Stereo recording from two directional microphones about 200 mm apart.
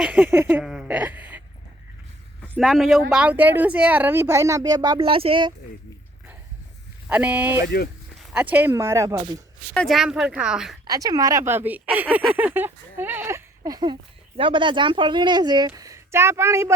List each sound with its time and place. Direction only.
0.0 s a sound: 10° right (ahead or behind)
2.4 s a woman's voice: centre (ahead or behind); by 5.5 s 25° right (ahead or behind)
7.1 s a woman's voice: 10° right (ahead or behind); by 9.4 s 25° right (ahead or behind)
9.7 s speech: centre (ahead or behind)
10.8 s a woman's voice: 20° right (ahead or behind)